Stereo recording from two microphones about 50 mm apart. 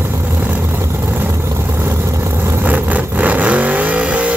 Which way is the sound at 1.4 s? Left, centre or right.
Right.